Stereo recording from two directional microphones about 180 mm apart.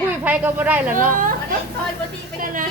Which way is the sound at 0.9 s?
50° right (ahead or behind).